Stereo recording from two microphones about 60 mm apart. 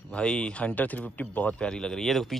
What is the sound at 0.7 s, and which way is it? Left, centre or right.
A man's voice, left.